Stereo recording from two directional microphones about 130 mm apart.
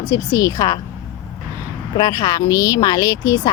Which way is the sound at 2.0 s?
30° left (ahead or behind).